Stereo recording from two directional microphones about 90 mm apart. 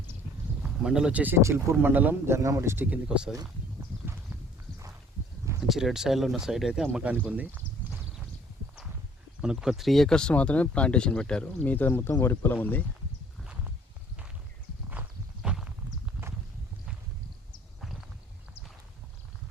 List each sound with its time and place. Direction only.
0.6 s a man's voice: 5° right (ahead or behind); by 2.8 s 30° right (ahead or behind)
2.8 s speech: 15° right (ahead or behind)
5.5 s speech: 5° right (ahead or behind)
6.9 s speech: 15° right (ahead or behind)
9.4 s speech: 5° right (ahead or behind); by 12.5 s 25° left (ahead or behind)
13.4 s walk: 10° right (ahead or behind)
15.4 s walk: 10° right (ahead or behind)